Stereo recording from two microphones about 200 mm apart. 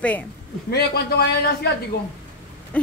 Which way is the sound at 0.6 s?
50° left (ahead or behind).